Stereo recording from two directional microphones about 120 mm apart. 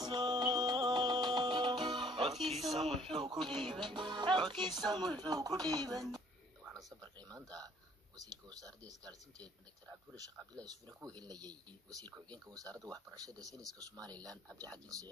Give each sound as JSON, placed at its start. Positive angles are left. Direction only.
{"t": 0.0, "sound": "music", "side_deg": -40}
{"t": 2.2, "sound": "speech", "side_deg": 0}
{"t": 3.0, "sound": "speech", "side_deg": -45}
{"t": 7.0, "sound": "a sound", "side_deg": -35}
{"t": 7.3, "sound": "speech", "side_deg": -30}
{"t": 11.1, "sound": "speech", "side_deg": -35}